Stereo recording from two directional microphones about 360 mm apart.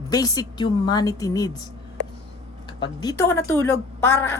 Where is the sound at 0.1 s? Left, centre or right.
Centre.